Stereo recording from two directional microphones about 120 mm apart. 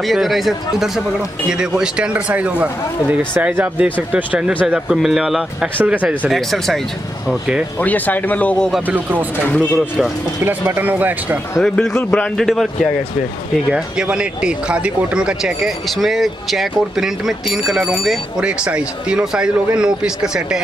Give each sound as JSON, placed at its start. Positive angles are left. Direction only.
{"t": 0.1, "sound": "speech", "side_deg": 0}
{"t": 7.8, "sound": "speech", "side_deg": 15}
{"t": 10.4, "sound": "speech", "side_deg": -15}
{"t": 11.6, "sound": "speech", "side_deg": 5}